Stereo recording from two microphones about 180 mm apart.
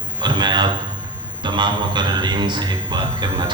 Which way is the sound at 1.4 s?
25° right (ahead or behind).